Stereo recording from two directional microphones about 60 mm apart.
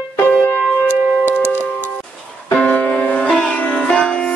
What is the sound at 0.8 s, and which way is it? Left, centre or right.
Music, right.